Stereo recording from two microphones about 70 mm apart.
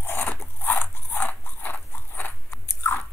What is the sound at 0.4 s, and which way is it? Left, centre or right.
Dog, left.